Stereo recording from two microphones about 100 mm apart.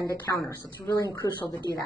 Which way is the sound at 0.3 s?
40° left (ahead or behind).